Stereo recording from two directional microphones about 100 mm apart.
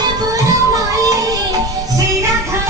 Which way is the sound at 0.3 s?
35° right (ahead or behind).